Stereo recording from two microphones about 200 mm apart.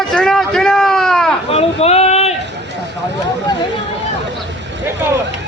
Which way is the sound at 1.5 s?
30° left (ahead or behind).